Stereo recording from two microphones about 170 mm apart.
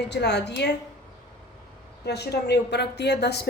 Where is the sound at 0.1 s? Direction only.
80° left.